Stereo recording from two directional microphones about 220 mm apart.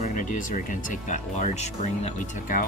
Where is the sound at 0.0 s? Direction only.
35° left (ahead or behind).